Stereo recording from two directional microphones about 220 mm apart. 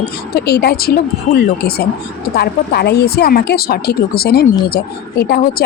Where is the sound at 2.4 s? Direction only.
45° left (ahead or behind).